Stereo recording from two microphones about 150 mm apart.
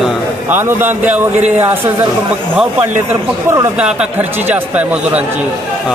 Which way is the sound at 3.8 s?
5° right (ahead or behind).